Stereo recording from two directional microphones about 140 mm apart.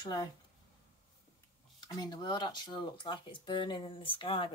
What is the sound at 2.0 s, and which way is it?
Speech, 30° left (ahead or behind).